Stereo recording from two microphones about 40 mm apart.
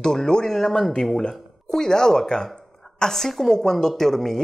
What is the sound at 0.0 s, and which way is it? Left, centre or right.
Speech, centre.